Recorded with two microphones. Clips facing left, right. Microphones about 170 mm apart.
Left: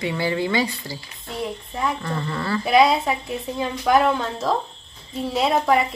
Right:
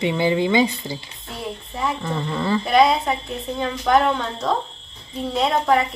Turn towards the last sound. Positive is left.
turn(degrees=5)  # may be behind; listen again after turning